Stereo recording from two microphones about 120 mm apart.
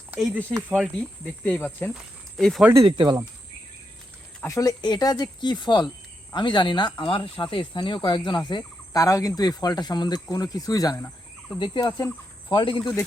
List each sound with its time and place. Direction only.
0.9 s speech: 10° left (ahead or behind)
1.9 s speech: centre (ahead or behind)
2.8 s speech: 40° right (ahead or behind)
4.4 s speech: 30° left (ahead or behind)